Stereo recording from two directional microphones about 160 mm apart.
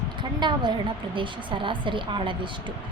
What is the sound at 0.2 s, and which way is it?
A woman's voice, 30° right (ahead or behind).